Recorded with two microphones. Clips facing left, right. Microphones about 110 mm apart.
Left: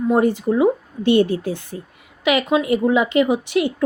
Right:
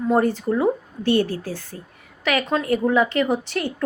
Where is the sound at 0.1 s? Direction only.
15° left (ahead or behind).